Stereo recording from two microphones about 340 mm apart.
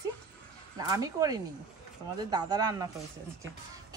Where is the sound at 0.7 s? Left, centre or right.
Centre.